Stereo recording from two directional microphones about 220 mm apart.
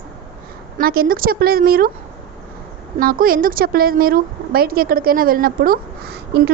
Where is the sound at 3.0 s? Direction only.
40° right (ahead or behind).